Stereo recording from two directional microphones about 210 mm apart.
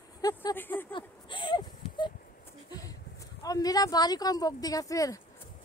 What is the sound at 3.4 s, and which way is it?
Speech, 15° left (ahead or behind).